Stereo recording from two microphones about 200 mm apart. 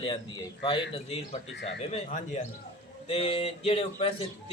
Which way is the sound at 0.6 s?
30° left (ahead or behind).